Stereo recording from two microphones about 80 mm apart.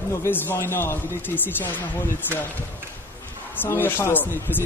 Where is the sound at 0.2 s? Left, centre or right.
Left.